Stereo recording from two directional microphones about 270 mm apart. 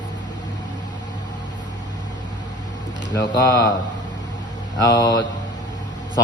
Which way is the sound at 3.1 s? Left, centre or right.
Centre.